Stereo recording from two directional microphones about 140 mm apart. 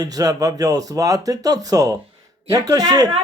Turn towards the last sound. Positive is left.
turn(degrees=-25)  # may be behind; listen again after turning